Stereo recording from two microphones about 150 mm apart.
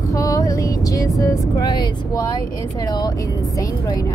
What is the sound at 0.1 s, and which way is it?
Music, 20° left (ahead or behind).